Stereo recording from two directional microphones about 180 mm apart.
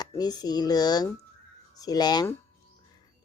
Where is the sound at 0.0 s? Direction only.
20° left (ahead or behind).